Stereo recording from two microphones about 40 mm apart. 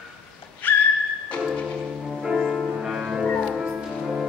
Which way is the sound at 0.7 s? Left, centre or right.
Left.